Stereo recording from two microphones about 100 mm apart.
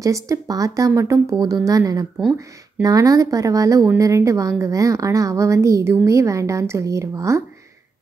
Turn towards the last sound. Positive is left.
turn(degrees=-30)  # may be behind; listen again after turning